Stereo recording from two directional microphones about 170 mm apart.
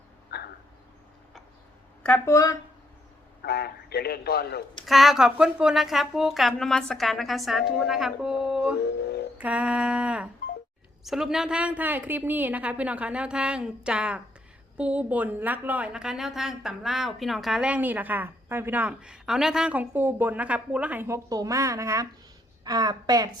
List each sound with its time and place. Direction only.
0.3 s a sound: 75° left (ahead or behind)
2.0 s speech: 15° left (ahead or behind)
3.4 s a man's voice: 70° left (ahead or behind)
4.9 s a woman's voice: centre (ahead or behind); by 23.3 s 20° right (ahead or behind)